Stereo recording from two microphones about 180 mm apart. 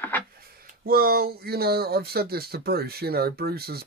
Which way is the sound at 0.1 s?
10° left (ahead or behind).